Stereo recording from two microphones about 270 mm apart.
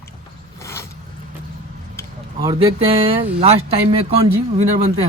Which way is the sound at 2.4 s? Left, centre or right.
Right.